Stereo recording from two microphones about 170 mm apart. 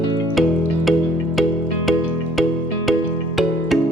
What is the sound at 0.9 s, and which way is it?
Music, centre (ahead or behind).